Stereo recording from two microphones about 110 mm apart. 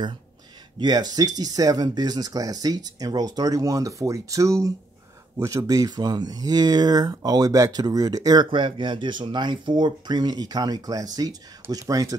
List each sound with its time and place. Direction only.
0.7 s speech: 40° right (ahead or behind)